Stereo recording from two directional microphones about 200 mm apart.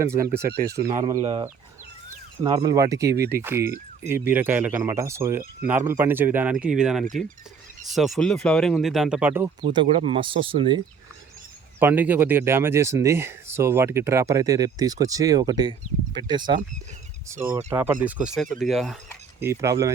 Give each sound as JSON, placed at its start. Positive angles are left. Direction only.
{"t": 0.0, "sound": "speech", "side_deg": -15}
{"t": 9.6, "sound": "speech", "side_deg": -25}
{"t": 11.8, "sound": "speech", "side_deg": -10}
{"t": 17.7, "sound": "speech", "side_deg": -10}
{"t": 19.4, "sound": "speech", "side_deg": -15}